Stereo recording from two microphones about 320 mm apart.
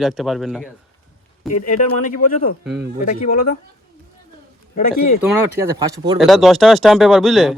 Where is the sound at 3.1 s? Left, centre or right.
Left.